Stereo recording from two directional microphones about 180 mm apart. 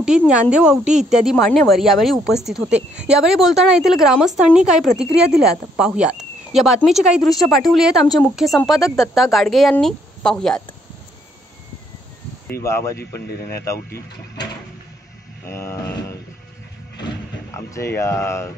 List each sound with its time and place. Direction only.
0.3 s speech: 5° right (ahead or behind)
12.6 s speech: 15° left (ahead or behind)
13.3 s speech: 60° left (ahead or behind)
15.4 s speech: 15° left (ahead or behind)
17.6 s speech: 15° left (ahead or behind)